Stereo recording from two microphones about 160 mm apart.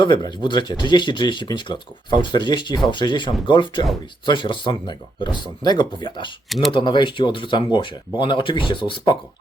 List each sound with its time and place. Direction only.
0.0 s speech: 30° left (ahead or behind)